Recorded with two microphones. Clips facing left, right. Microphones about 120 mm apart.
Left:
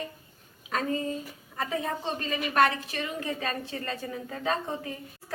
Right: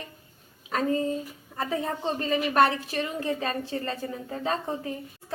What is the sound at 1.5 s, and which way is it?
A woman's voice, 35° right (ahead or behind).